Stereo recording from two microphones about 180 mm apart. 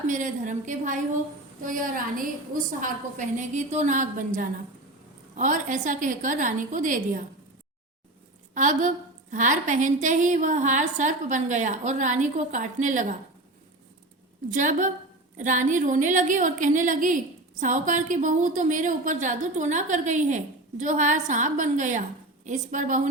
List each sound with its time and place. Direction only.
0.1 s a woman's voice: 45° right (ahead or behind)
8.5 s a woman's voice: 45° right (ahead or behind)
14.5 s a woman's voice: 45° right (ahead or behind)